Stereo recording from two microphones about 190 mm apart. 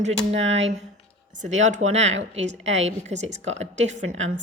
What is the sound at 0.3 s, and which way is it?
Speech, 75° right (ahead or behind).